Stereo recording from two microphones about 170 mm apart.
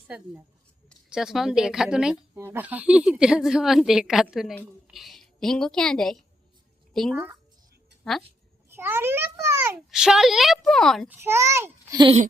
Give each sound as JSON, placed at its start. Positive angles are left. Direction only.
{"t": 0.9, "sound": "a woman's voice", "side_deg": -5}
{"t": 8.7, "sound": "a child's voice", "side_deg": -15}
{"t": 11.1, "sound": "a child's voice", "side_deg": -15}